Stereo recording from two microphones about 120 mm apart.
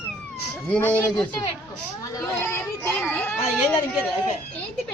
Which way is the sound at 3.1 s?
15° left (ahead or behind).